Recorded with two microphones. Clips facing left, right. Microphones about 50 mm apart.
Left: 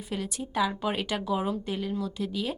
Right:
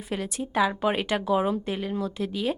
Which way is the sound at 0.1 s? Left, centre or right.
Right.